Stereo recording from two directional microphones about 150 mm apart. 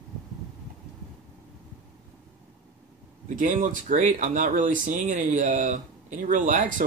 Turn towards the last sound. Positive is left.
turn(degrees=-60)  # may be behind; listen again after turning